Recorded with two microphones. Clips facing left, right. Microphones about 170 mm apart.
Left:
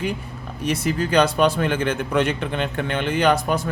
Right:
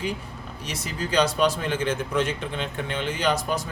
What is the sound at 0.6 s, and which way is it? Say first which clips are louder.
Speech: left 10 dB; 55° left (ahead or behind).